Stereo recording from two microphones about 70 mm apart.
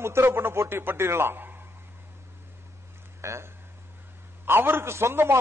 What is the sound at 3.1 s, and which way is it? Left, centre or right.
A man's voice, right.